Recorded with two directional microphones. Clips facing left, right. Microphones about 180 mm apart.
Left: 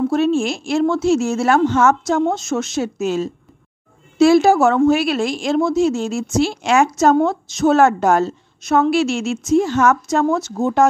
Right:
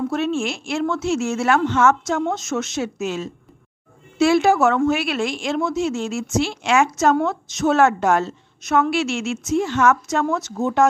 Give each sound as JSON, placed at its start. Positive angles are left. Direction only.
{"t": 0.1, "sound": "a woman's voice", "side_deg": 35}